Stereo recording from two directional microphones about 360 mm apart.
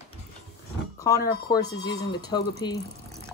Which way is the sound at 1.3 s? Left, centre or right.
Centre.